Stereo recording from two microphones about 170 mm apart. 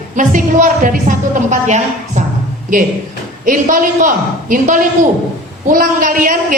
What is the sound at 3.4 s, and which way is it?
A woman's voice, 50° right (ahead or behind).